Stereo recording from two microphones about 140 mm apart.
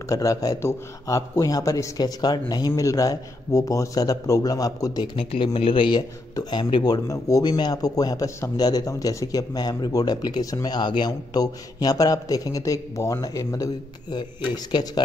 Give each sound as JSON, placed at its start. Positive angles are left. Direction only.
{"t": 0.1, "sound": "a man's voice", "side_deg": 25}